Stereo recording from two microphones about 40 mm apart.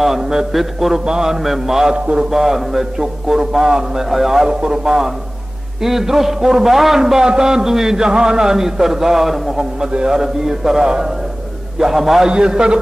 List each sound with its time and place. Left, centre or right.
0.0 s a man's voice: centre
2.0 s a man's voice: right
2.3 s a man's voice: centre
4.5 s a man's voice: right; by 12.3 s centre
12.3 s a man's voice: right